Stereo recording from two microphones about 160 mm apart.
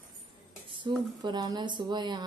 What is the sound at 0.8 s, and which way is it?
A woman's voice, 25° right (ahead or behind).